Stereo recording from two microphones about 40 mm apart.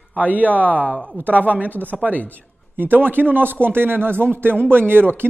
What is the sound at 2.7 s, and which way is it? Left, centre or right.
Speech, right.